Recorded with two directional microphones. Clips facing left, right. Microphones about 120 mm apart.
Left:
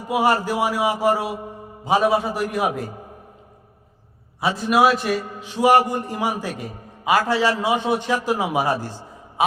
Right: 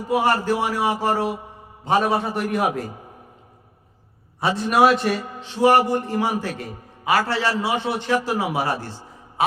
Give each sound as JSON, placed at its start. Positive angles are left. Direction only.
{"t": 0.1, "sound": "a man's voice", "side_deg": 10}
{"t": 4.4, "sound": "a man's voice", "side_deg": 0}
{"t": 5.6, "sound": "a man's voice", "side_deg": 15}
{"t": 9.4, "sound": "mantra", "side_deg": 15}